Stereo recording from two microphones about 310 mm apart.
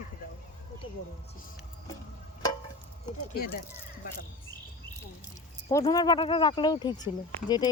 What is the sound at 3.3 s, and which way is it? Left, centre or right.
Speech, left.